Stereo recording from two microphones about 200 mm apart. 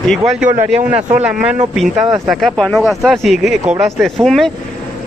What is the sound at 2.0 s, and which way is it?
Speech, 15° right (ahead or behind).